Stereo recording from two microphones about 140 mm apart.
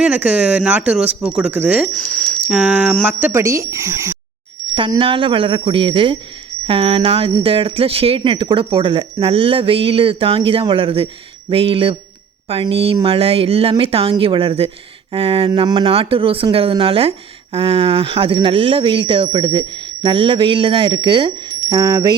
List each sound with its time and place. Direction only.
0.0 s speech: 10° right (ahead or behind)
1.9 s speech: 10° left (ahead or behind)
2.5 s speech: 5° right (ahead or behind)
3.4 s speech: 20° right (ahead or behind)
4.7 s a woman's voice: 35° right (ahead or behind)